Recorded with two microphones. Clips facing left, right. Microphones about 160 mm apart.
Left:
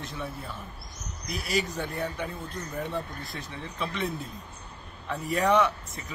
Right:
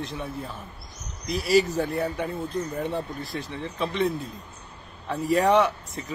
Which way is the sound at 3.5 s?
30° right (ahead or behind).